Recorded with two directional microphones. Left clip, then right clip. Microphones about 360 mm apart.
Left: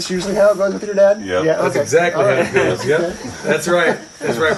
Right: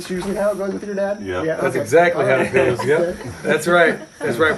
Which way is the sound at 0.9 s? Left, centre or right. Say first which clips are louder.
Left 10 dB; left.